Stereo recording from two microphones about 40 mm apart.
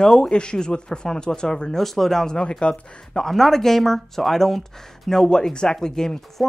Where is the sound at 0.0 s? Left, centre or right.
Centre.